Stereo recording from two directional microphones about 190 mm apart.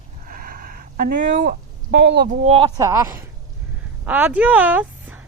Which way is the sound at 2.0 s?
65° right (ahead or behind).